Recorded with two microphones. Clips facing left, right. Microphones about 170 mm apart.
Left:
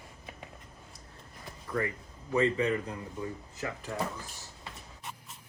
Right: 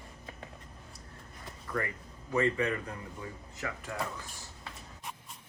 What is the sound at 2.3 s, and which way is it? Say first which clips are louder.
Speech: left 2 dB; 25° left (ahead or behind).